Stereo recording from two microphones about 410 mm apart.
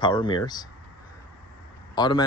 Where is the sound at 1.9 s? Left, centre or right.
Centre.